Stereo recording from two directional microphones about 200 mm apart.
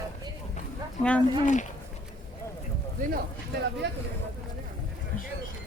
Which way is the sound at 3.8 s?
60° right (ahead or behind).